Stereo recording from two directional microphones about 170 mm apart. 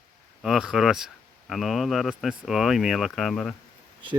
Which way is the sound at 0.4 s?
5° right (ahead or behind).